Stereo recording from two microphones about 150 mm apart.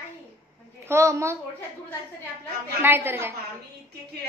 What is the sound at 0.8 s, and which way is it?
Speech, 20° right (ahead or behind).